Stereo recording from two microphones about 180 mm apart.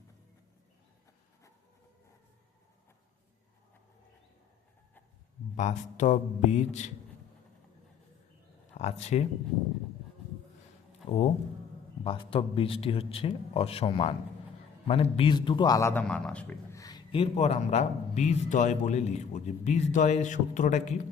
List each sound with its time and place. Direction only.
5.5 s a man's voice: 40° left (ahead or behind)
8.8 s speech: 35° left (ahead or behind)
11.0 s a man's voice: 30° left (ahead or behind); by 16.8 s 10° left (ahead or behind)
16.8 s a man's voice: 25° left (ahead or behind); by 20.9 s 40° left (ahead or behind)